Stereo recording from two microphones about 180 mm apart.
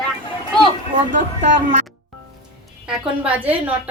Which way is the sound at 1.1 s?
40° right (ahead or behind).